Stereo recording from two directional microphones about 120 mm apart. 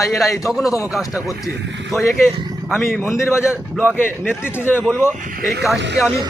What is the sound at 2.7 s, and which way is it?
A man's voice, 15° left (ahead or behind).